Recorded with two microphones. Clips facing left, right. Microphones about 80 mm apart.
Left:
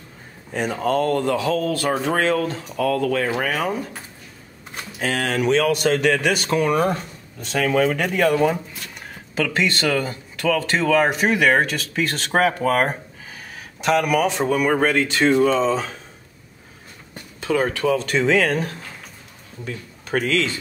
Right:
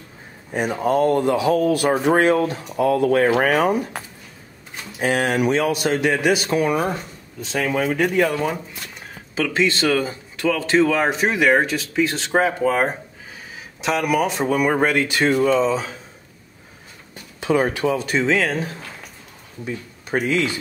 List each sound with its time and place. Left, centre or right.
0.6 s speech: centre
4.9 s speech: centre
17.4 s speech: right; by 18.8 s centre
19.6 s speech: centre